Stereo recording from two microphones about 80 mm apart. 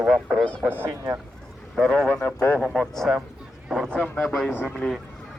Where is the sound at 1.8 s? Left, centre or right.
Centre.